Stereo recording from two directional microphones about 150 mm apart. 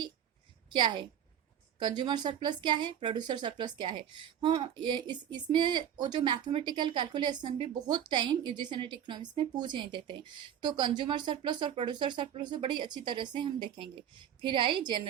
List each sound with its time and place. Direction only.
0.8 s speech: 35° right (ahead or behind)